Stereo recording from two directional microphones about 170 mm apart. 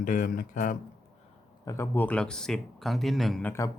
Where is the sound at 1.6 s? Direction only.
20° left (ahead or behind); by 3.5 s centre (ahead or behind).